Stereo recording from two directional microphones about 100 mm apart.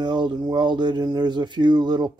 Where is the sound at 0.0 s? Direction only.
50° right (ahead or behind).